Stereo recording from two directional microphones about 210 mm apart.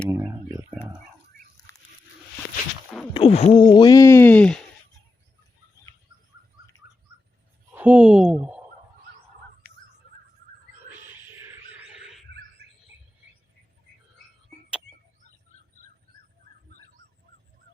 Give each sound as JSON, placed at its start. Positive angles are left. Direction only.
{"t": 0.1, "sound": "a sound", "side_deg": -10}
{"t": 1.7, "sound": "wild animals", "side_deg": 15}
{"t": 3.1, "sound": "speech", "side_deg": 30}
{"t": 7.7, "sound": "speech", "side_deg": -10}
{"t": 11.9, "sound": "wild animals", "side_deg": -5}